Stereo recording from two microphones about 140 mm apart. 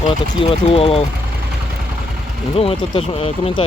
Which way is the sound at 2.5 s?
45° left (ahead or behind).